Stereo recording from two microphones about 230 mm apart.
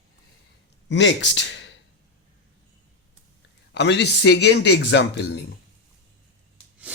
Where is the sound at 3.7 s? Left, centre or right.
Left.